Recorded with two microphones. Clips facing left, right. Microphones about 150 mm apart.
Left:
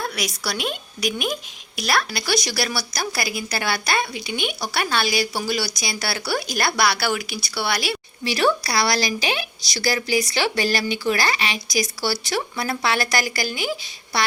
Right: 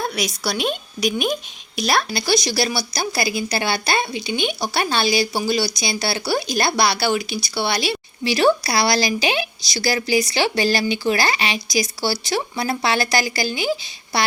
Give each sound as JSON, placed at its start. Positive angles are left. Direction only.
{"t": 0.0, "sound": "speech", "side_deg": -25}